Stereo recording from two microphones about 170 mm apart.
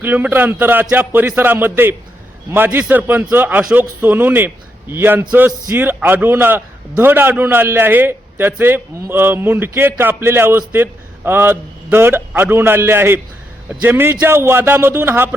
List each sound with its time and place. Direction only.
0.0 s a man's voice: 10° right (ahead or behind)